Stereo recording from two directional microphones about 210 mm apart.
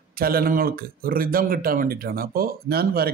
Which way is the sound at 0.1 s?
45° right (ahead or behind).